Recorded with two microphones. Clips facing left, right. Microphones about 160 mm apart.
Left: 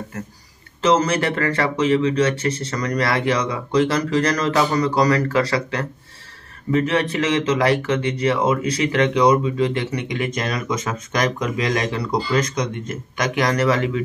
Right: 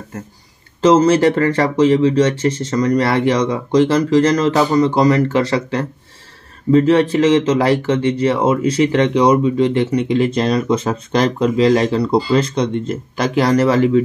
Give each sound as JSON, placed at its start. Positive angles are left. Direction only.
{"t": 0.8, "sound": "speech", "side_deg": -30}